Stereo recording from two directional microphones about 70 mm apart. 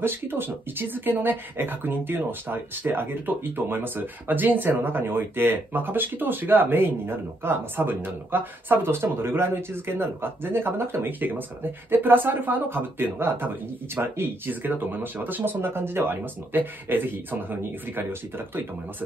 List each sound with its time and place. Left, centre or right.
0.0 s speech: right